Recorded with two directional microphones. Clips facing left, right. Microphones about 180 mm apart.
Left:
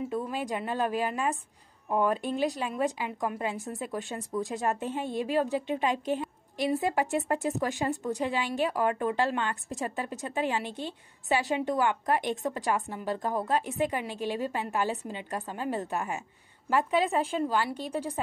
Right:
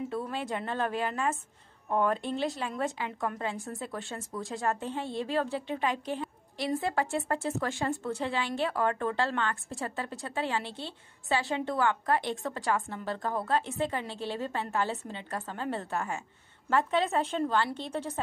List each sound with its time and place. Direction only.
0.1 s speech: 15° left (ahead or behind)